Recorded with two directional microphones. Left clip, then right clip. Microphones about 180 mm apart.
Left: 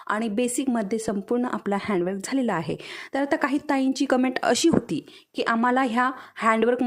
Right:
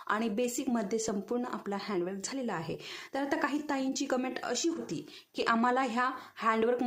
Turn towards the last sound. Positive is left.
turn(degrees=35)  # may be behind; listen again after turning